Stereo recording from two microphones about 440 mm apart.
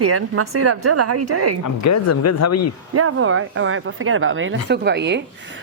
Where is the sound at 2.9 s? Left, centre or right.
Right.